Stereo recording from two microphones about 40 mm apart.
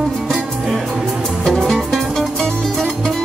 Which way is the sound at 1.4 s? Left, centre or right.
Centre.